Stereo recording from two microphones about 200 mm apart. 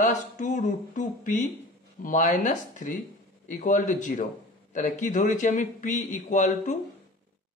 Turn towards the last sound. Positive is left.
turn(degrees=35)  # may be behind; listen again after turning